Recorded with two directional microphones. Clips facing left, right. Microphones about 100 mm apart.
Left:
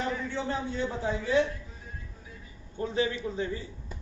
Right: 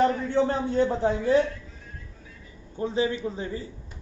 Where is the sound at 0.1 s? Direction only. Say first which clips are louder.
Right 8 dB; 50° right (ahead or behind).